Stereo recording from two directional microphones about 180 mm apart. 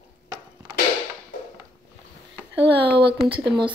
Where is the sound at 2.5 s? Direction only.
70° right (ahead or behind).